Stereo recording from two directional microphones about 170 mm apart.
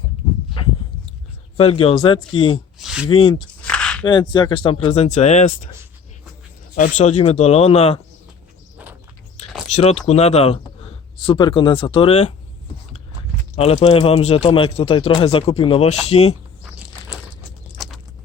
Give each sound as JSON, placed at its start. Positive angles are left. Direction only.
{"t": 0.6, "sound": "a sound", "side_deg": 30}
{"t": 1.5, "sound": "speech", "side_deg": 35}
{"t": 2.7, "sound": "speech", "side_deg": -5}
{"t": 3.1, "sound": "speech", "side_deg": 30}
{"t": 3.3, "sound": "a sound", "side_deg": 5}
{"t": 4.0, "sound": "speech", "side_deg": 25}
{"t": 6.7, "sound": "speech", "side_deg": 45}
{"t": 9.6, "sound": "speech", "side_deg": 40}
{"t": 13.8, "sound": "speech", "side_deg": 35}